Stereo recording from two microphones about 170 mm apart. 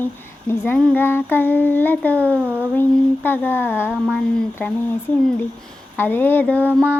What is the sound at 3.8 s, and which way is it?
Female singing, 10° right (ahead or behind).